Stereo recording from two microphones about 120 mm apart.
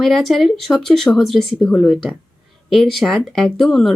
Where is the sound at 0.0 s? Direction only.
Centre (ahead or behind).